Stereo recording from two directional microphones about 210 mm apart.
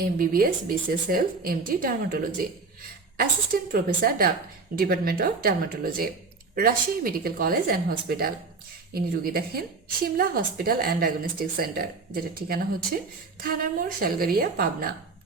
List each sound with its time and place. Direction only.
0.0 s a woman's voice: 45° right (ahead or behind)